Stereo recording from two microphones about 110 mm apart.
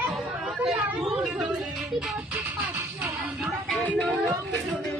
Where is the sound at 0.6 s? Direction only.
Centre (ahead or behind).